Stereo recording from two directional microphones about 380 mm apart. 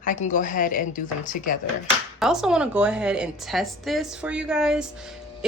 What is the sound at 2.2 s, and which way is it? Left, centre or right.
A woman's voice, centre.